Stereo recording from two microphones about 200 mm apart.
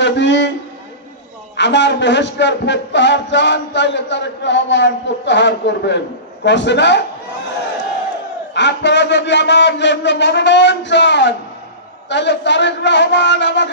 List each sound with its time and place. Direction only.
0.0 s a man's voice: 65° left (ahead or behind)
1.6 s a man's voice: 60° left (ahead or behind)
8.5 s a man's voice: 60° left (ahead or behind)